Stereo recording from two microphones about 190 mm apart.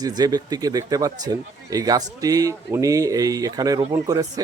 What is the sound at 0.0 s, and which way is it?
Speech, 20° right (ahead or behind).